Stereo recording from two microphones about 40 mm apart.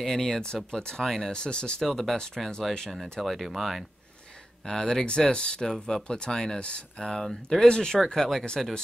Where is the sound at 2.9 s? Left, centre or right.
Centre.